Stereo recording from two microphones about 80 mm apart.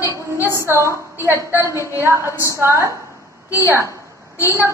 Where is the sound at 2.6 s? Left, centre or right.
Right.